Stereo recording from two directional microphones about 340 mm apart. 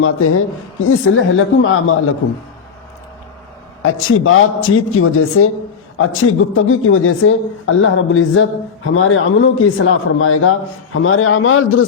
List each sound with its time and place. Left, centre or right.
0.0 s speech: left
3.8 s speech: left
6.5 s speech: left